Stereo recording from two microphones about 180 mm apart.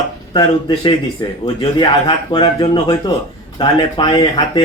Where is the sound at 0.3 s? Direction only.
25° left (ahead or behind).